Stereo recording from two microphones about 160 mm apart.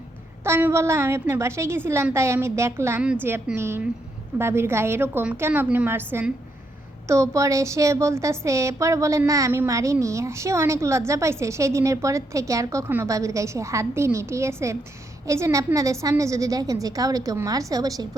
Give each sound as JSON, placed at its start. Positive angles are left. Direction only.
{"t": 0.4, "sound": "a woman's voice", "side_deg": -15}